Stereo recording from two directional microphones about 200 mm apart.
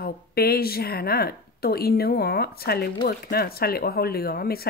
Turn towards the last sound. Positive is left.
turn(degrees=50)  # may be behind; listen again after turning